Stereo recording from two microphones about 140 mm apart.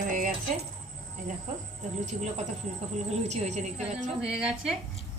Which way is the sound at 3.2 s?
55° right (ahead or behind).